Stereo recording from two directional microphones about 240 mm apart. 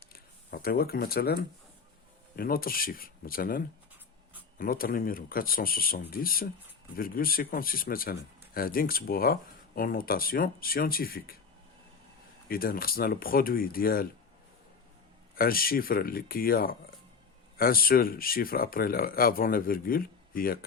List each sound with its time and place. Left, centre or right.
0.1 s a sound: left
2.3 s speech: left
12.5 s speech: left
15.4 s speech: left